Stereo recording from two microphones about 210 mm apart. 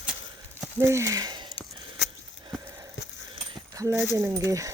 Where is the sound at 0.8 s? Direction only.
15° right (ahead or behind).